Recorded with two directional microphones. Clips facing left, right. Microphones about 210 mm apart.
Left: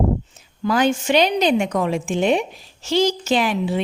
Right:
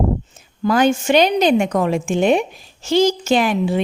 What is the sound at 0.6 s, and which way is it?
A woman's voice, 45° right (ahead or behind).